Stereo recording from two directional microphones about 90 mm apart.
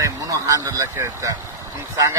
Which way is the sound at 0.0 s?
40° right (ahead or behind).